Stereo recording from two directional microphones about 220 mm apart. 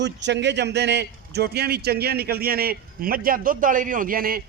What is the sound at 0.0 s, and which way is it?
Speech, 50° right (ahead or behind).